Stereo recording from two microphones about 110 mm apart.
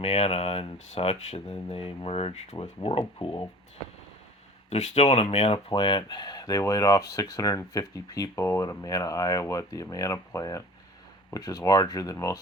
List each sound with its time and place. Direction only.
0.0 s speech: 65° left (ahead or behind)
2.6 s speech: 60° left (ahead or behind)
4.7 s speech: 85° left
5.3 s speech: 70° left (ahead or behind)
5.5 s speech: 50° left (ahead or behind); by 12.4 s 30° left (ahead or behind)